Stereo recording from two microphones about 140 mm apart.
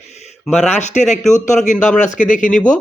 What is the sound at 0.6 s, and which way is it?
A man's voice, 55° left (ahead or behind).